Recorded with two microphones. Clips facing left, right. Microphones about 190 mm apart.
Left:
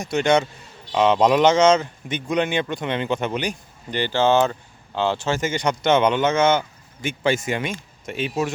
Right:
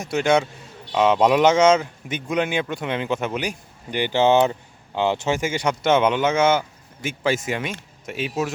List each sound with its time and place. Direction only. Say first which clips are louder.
0.0 s speech: even; 5° right (ahead or behind)